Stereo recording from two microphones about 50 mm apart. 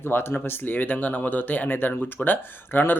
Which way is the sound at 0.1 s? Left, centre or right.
Left.